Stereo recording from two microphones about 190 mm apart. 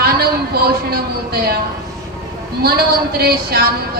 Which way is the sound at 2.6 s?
55° right (ahead or behind).